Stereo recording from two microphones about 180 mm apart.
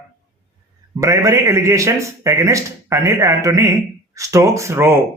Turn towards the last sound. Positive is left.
turn(degrees=-15)  # may be behind; listen again after turning